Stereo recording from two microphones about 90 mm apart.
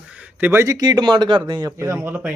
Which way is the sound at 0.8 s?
50° right (ahead or behind).